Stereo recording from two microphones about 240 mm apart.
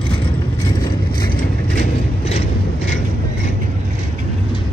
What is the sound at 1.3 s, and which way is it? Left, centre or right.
Mechanisms, left.